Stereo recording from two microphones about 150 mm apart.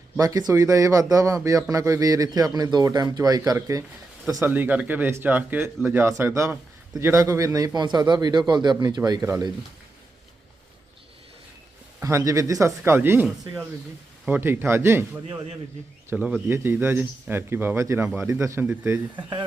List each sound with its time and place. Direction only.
0.2 s a man's voice: 25° right (ahead or behind)
11.9 s speech: 20° right (ahead or behind)